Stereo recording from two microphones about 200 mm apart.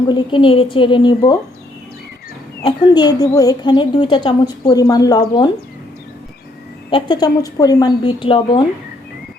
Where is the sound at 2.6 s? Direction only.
20° left (ahead or behind).